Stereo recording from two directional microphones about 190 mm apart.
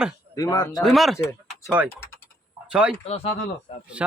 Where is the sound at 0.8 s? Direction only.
Centre (ahead or behind).